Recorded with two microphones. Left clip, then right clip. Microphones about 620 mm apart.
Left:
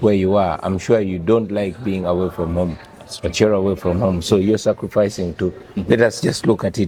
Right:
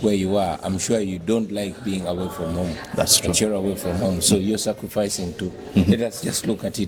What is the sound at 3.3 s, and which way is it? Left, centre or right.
Speech, left.